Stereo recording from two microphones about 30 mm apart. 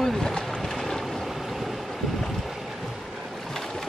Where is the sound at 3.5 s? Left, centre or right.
Centre.